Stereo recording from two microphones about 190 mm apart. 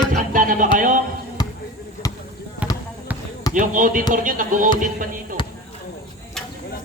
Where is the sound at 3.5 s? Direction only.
45° right (ahead or behind).